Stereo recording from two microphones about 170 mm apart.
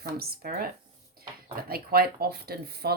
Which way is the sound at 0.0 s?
60° right (ahead or behind).